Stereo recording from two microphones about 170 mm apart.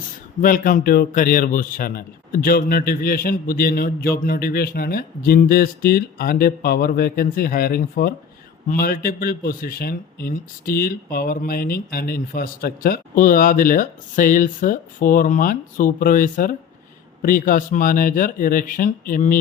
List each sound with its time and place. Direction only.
0.4 s a man's voice: 55° left (ahead or behind)